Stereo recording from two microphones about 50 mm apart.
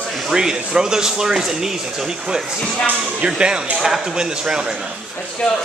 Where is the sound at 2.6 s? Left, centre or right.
Centre.